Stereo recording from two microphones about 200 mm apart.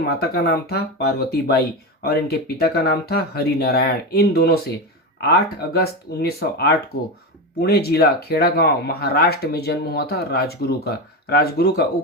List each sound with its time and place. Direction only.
0.0 s speech: 55° left (ahead or behind)